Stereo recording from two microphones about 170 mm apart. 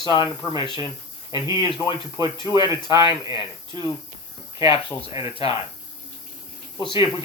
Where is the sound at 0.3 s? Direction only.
25° right (ahead or behind).